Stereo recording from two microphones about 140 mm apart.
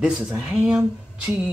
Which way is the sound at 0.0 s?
5° right (ahead or behind).